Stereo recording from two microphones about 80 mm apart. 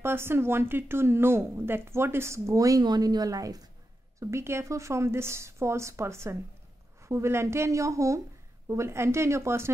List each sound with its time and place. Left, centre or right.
0.0 s speech: right
4.2 s speech: right